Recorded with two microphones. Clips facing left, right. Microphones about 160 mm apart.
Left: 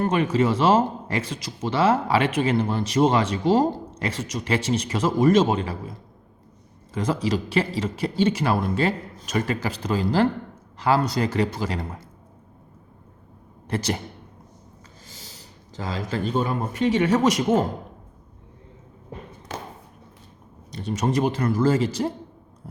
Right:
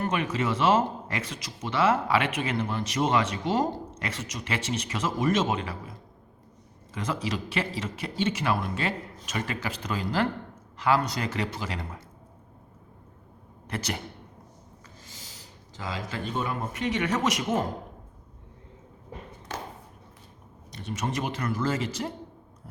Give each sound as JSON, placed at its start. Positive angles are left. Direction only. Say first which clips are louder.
{"t": 0.0, "sound": "speech", "louder": "left 7 dB", "side_deg": 35}
{"t": 6.9, "sound": "speech", "louder": "left 7 dB", "side_deg": 35}
{"t": 13.7, "sound": "speech", "louder": "left 7 dB", "side_deg": 30}
{"t": 15.7, "sound": "speech", "louder": "left 6 dB", "side_deg": 40}
{"t": 20.7, "sound": "speech", "louder": "left 8 dB", "side_deg": 35}